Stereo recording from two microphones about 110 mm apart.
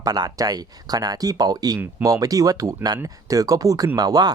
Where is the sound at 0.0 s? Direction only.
35° right (ahead or behind).